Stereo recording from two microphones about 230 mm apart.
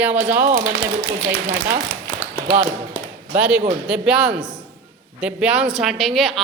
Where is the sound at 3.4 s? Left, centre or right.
Centre.